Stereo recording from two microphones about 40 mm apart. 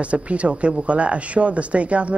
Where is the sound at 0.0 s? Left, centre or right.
Right.